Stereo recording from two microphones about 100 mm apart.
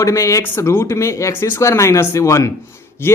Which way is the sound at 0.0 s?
30° left (ahead or behind).